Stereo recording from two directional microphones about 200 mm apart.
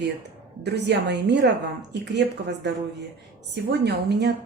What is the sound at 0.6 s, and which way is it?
A woman's voice, 55° right (ahead or behind).